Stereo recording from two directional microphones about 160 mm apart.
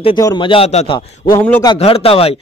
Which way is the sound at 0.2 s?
30° left (ahead or behind).